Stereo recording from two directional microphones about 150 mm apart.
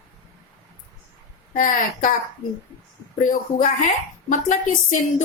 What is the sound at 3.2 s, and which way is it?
Speech, 55° left (ahead or behind).